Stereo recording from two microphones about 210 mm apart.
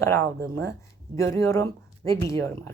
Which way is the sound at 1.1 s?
15° left (ahead or behind).